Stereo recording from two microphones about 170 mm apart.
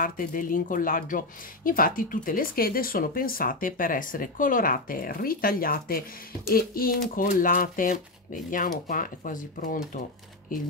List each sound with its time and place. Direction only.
0.0 s speech: 55° left (ahead or behind)